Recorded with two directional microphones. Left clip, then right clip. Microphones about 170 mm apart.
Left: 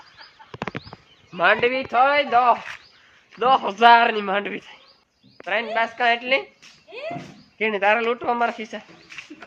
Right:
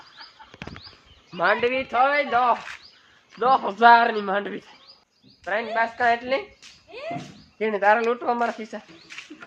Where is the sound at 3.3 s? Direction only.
5° left (ahead or behind).